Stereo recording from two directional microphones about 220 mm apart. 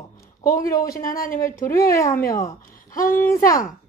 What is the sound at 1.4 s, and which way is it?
A woman's voice, 15° left (ahead or behind).